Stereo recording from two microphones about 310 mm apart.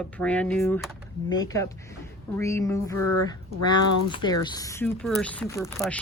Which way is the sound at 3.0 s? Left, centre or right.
Left.